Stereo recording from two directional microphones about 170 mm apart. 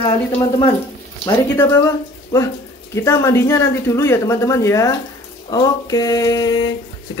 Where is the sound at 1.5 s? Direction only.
15° left (ahead or behind).